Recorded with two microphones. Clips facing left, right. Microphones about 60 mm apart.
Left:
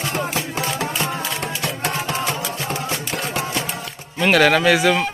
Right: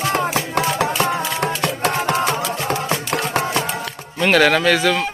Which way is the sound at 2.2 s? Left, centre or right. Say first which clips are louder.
Right 4 dB; right.